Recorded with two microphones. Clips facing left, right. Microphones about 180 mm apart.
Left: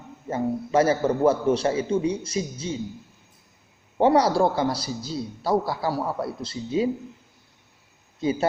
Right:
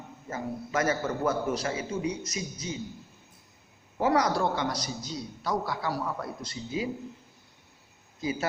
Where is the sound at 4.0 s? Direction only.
30° left (ahead or behind).